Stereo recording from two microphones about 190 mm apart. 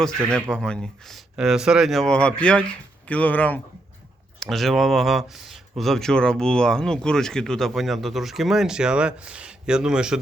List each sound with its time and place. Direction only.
0.5 s speech: 5° left (ahead or behind)